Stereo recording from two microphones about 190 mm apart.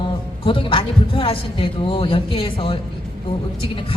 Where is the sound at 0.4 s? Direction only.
30° left (ahead or behind).